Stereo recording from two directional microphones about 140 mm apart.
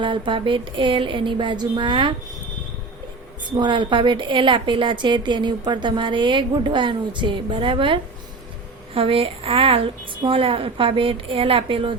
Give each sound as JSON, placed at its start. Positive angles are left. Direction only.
{"t": 0.0, "sound": "a woman's voice", "side_deg": -35}
{"t": 3.5, "sound": "a woman's voice", "side_deg": -35}
{"t": 9.0, "sound": "a woman's voice", "side_deg": -40}